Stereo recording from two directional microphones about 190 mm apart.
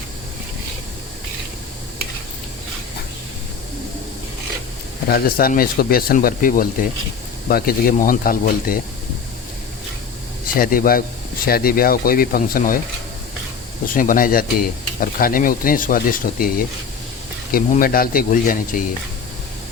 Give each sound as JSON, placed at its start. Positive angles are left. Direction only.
{"t": 5.0, "sound": "speech", "side_deg": 55}
{"t": 10.5, "sound": "speech", "side_deg": 50}
{"t": 13.8, "sound": "speech", "side_deg": 45}